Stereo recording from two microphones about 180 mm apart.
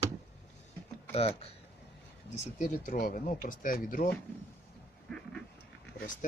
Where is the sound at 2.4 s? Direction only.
45° left (ahead or behind).